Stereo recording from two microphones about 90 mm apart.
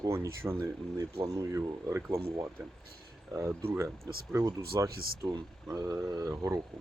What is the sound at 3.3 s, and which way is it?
Speech, 25° right (ahead or behind).